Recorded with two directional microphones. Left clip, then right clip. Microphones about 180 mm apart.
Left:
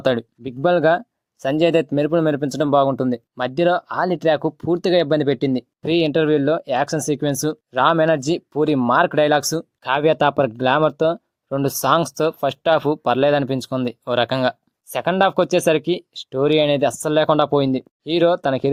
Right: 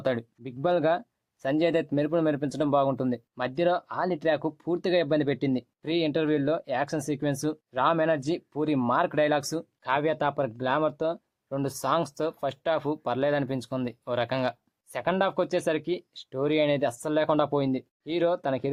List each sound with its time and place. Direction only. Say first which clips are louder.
0.0 s speech: left 9 dB; 35° left (ahead or behind)